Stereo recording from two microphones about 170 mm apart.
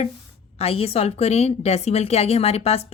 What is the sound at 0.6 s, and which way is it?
A woman's voice, 35° left (ahead or behind).